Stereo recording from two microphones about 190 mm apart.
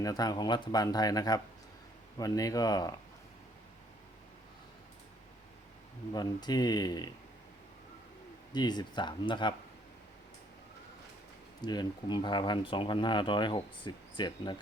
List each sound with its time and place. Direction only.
0.0 s speech: 20° left (ahead or behind)
6.1 s speech: 20° left (ahead or behind)
8.5 s speech: 20° left (ahead or behind)
11.6 s speech: 20° left (ahead or behind)